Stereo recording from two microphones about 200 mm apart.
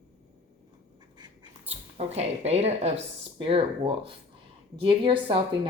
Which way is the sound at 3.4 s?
25° right (ahead or behind).